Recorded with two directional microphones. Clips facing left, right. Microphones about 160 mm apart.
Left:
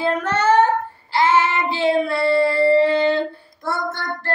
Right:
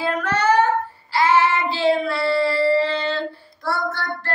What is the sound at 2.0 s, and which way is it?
Child singing, 50° left (ahead or behind).